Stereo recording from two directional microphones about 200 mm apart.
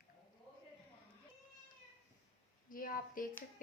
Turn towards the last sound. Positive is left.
turn(degrees=45)  # may be behind; listen again after turning